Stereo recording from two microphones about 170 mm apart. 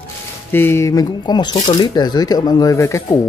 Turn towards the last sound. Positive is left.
turn(degrees=15)  # may be behind; listen again after turning